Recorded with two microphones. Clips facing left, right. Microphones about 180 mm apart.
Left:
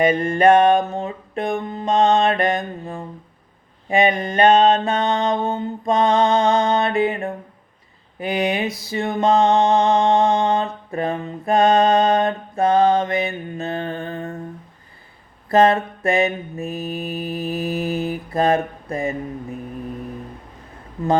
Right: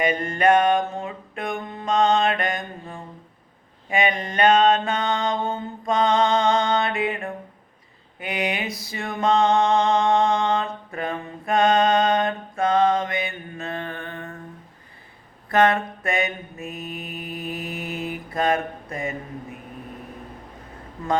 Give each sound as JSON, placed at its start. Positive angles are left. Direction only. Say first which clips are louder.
{"t": 0.1, "sound": "mantra", "louder": "left 5 dB", "side_deg": 30}
{"t": 15.4, "sound": "mantra", "louder": "left 4 dB", "side_deg": 30}